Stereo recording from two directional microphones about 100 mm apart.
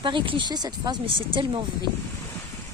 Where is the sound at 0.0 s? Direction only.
55° right (ahead or behind).